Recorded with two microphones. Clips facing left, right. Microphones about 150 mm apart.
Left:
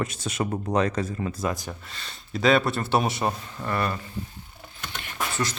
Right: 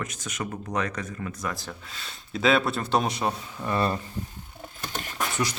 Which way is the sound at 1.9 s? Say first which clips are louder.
Left 1 dB; centre (ahead or behind).